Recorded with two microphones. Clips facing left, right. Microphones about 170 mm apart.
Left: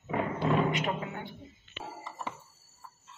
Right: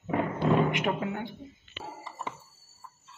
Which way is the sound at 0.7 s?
55° right (ahead or behind).